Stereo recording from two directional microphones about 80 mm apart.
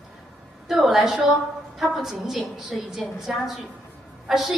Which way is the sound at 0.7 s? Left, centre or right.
Centre.